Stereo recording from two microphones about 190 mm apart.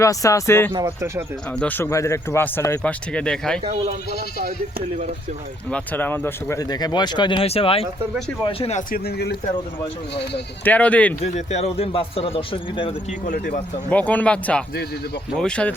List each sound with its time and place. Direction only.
0.0 s speech: 15° left (ahead or behind)
0.7 s speech: 15° right (ahead or behind)
1.5 s speech: 10° left (ahead or behind)
3.6 s speech: 35° right (ahead or behind)
5.7 s speech: 10° left (ahead or behind); by 8.8 s 30° left (ahead or behind)
8.9 s speech: 60° left (ahead or behind)
10.6 s speech: 10° left (ahead or behind)
11.2 s speech: 35° left (ahead or behind)
13.2 s speech: 45° left (ahead or behind)
13.9 s speech: 10° left (ahead or behind)